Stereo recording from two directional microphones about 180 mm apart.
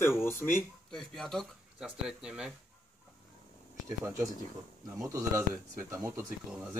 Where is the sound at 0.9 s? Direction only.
Centre (ahead or behind).